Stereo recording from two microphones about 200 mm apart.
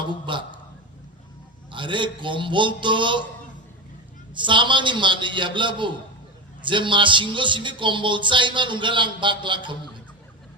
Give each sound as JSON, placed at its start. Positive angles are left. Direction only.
{"t": 0.0, "sound": "a sound", "side_deg": -25}
{"t": 1.7, "sound": "a man's voice", "side_deg": -25}
{"t": 4.4, "sound": "a man's voice", "side_deg": -25}